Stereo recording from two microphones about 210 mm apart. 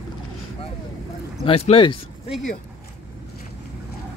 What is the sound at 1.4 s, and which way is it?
Speech, 25° left (ahead or behind).